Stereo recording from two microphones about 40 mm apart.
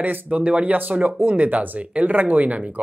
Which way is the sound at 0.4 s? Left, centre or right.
Right.